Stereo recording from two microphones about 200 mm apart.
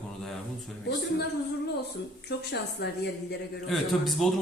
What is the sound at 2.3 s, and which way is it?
Speech, 55° left (ahead or behind).